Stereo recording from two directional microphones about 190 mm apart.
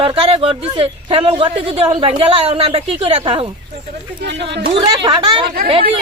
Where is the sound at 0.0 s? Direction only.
30° right (ahead or behind).